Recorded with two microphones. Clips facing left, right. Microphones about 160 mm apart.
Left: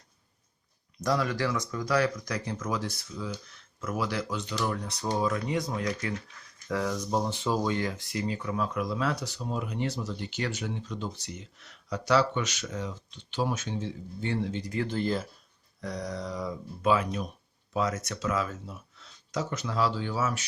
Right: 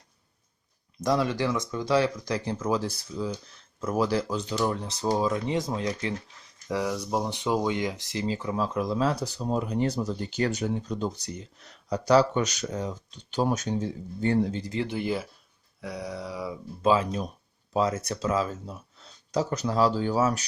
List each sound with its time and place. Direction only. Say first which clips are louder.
1.0 s speech: right 3 dB; 25° right (ahead or behind)
6.7 s speech: right 1 dB; 15° right (ahead or behind)
8.1 s speech: right 3 dB; 25° right (ahead or behind)
14.7 s speech: even; 15° right (ahead or behind)
16.8 s speech: right 3 dB; 30° right (ahead or behind)